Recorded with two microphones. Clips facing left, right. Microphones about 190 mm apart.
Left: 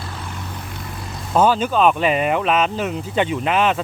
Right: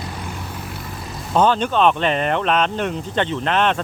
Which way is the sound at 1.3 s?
5° left (ahead or behind).